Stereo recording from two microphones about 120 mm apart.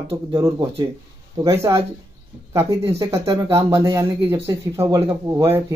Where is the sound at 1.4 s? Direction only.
25° right (ahead or behind).